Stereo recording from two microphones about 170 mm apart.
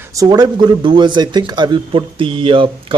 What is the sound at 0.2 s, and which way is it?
Speech, 20° right (ahead or behind).